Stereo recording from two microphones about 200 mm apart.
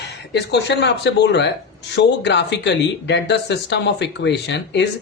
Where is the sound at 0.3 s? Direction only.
55° left (ahead or behind).